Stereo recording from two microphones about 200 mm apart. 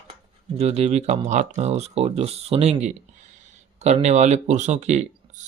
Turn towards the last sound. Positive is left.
turn(degrees=-35)  # may be behind; listen again after turning